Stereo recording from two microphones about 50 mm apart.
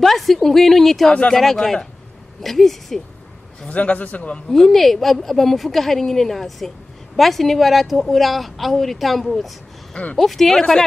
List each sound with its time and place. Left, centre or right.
0.0 s speech: centre
3.6 s a man's voice: left
4.5 s speech: centre